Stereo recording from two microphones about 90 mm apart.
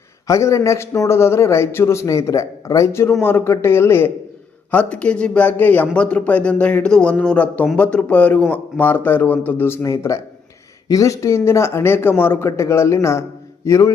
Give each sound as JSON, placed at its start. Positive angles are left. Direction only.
{"t": 0.3, "sound": "a man's voice", "side_deg": 35}
{"t": 4.7, "sound": "a man's voice", "side_deg": 15}
{"t": 9.8, "sound": "a man's voice", "side_deg": 35}